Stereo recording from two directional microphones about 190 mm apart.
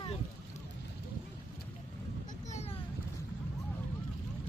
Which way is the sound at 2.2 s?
35° left (ahead or behind).